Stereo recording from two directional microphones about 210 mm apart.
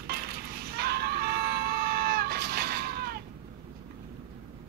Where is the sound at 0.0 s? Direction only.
50° right (ahead or behind).